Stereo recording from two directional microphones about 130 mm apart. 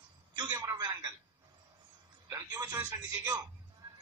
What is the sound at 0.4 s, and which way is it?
Speech, 35° right (ahead or behind).